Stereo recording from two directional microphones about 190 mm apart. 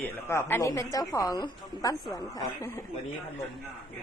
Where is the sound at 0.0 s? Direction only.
15° left (ahead or behind).